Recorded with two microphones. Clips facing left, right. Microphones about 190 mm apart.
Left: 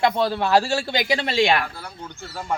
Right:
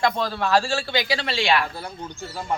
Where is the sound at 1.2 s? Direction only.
45° left (ahead or behind).